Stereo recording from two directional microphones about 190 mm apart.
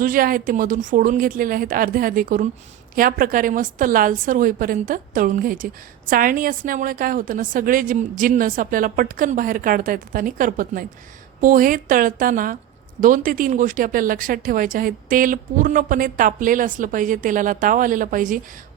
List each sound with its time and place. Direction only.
0.0 s speech: 50° right (ahead or behind)